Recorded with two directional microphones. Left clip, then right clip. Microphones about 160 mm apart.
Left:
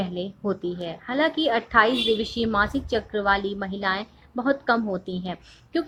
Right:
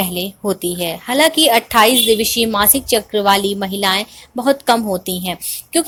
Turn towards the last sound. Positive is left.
turn(degrees=-20)  # may be behind; listen again after turning